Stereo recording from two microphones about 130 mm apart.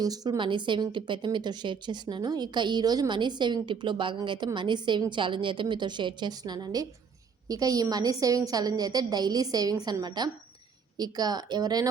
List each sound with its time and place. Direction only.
0.0 s a woman's voice: 30° right (ahead or behind)